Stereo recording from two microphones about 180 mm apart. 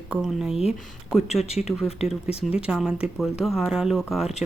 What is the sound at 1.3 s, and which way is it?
Speech, 35° left (ahead or behind).